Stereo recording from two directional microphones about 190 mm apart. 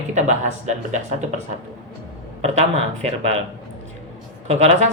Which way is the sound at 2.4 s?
35° right (ahead or behind).